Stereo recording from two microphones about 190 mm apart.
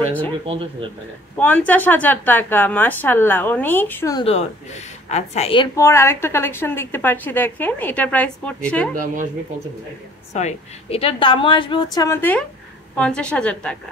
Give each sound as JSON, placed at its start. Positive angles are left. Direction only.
{"t": 1.3, "sound": "a woman's voice", "side_deg": 10}
{"t": 4.2, "sound": "a woman's voice", "side_deg": 30}
{"t": 5.8, "sound": "a woman's voice", "side_deg": 15}
{"t": 8.9, "sound": "speech", "side_deg": -45}
{"t": 10.3, "sound": "a woman's voice", "side_deg": 35}